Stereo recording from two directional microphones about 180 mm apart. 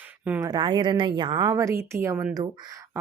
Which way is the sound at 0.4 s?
25° right (ahead or behind).